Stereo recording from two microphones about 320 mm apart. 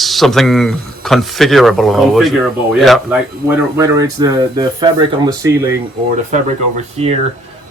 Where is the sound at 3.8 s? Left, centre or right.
Centre.